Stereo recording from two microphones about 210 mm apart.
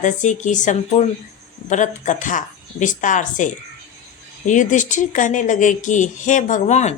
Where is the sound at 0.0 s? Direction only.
35° left (ahead or behind).